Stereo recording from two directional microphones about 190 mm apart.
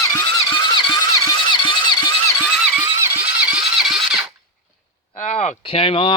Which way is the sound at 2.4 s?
5° right (ahead or behind).